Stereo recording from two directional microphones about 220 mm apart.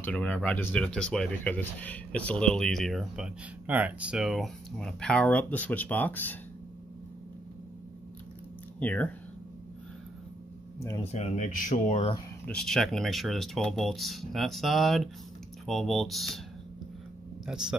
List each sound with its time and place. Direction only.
0.0 s speech: 5° left (ahead or behind)
8.7 s speech: 5° left (ahead or behind)
11.0 s speech: 30° left (ahead or behind)
12.4 s speech: centre (ahead or behind)
17.5 s speech: 5° right (ahead or behind)